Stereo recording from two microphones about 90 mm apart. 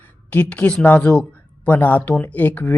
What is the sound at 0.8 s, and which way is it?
Speech, 15° left (ahead or behind).